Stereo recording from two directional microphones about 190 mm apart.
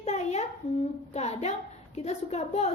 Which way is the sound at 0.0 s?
35° left (ahead or behind).